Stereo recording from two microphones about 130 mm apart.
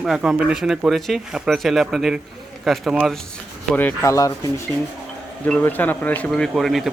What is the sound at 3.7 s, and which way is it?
Speech, 20° left (ahead or behind).